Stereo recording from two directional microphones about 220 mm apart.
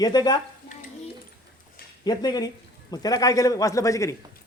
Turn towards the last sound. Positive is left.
turn(degrees=15)  # may be behind; listen again after turning